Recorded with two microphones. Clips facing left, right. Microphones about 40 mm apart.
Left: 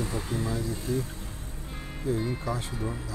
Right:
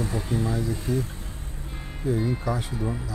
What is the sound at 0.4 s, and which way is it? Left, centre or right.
Speech, centre.